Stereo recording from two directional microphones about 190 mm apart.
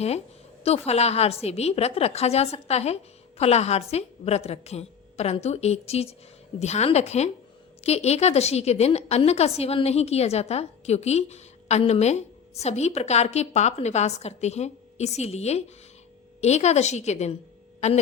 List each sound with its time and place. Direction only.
0.6 s a woman's voice: 35° left (ahead or behind)